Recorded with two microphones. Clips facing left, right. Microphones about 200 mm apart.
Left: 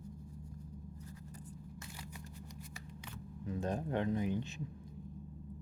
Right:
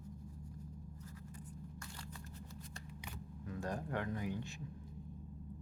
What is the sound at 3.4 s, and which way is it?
Speech, 20° left (ahead or behind).